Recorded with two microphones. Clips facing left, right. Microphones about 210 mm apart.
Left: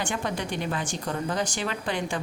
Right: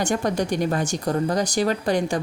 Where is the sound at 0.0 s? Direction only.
40° right (ahead or behind).